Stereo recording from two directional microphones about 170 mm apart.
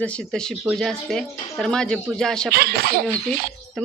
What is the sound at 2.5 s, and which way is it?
Speech, 65° right (ahead or behind).